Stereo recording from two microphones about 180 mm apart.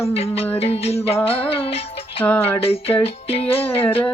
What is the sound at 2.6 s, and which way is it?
Music, 35° left (ahead or behind).